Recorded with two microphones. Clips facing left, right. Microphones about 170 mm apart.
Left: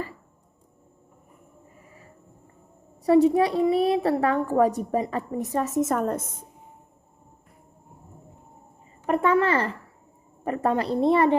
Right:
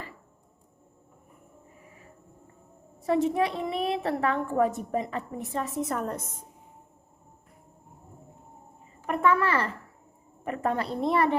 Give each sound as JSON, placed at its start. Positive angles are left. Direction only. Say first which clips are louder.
{"t": 3.1, "sound": "a woman's voice", "louder": "left 7 dB", "side_deg": 35}
{"t": 9.0, "sound": "a woman's voice", "louder": "left 3 dB", "side_deg": 30}